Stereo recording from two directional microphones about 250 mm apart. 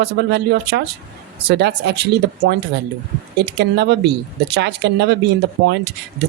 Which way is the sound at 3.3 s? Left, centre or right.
Right.